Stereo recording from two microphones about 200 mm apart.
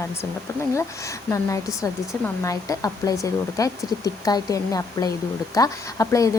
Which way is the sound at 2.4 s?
15° left (ahead or behind).